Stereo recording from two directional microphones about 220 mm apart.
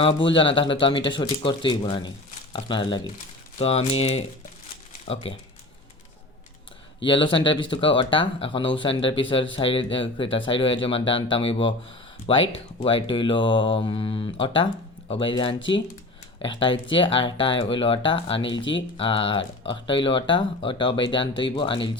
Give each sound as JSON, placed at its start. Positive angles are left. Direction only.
{"t": 0.3, "sound": "speech", "side_deg": 25}
{"t": 7.0, "sound": "speech", "side_deg": 20}